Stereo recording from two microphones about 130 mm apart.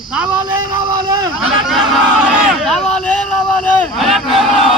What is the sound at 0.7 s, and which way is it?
Speech, 35° right (ahead or behind).